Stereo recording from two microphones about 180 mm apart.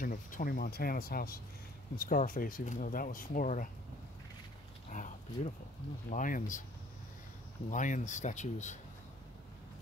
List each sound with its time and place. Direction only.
0.0 s speech: 50° left (ahead or behind)
4.8 s speech: 45° left (ahead or behind)
7.7 s speech: 45° left (ahead or behind)